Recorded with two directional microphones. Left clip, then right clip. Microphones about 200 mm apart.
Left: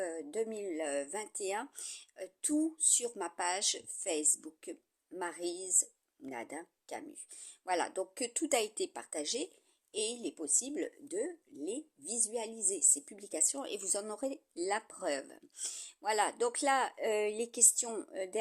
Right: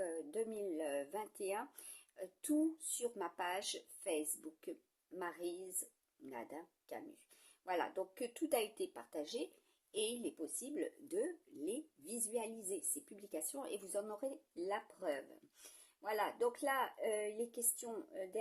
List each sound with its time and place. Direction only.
0.0 s speech: 35° left (ahead or behind)
11.1 s a woman's voice: 25° left (ahead or behind); by 18.3 s 45° left (ahead or behind)